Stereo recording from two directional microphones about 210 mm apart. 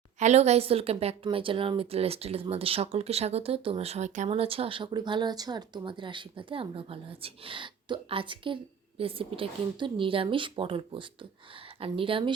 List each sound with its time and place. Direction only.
0.2 s a woman's voice: 35° right (ahead or behind)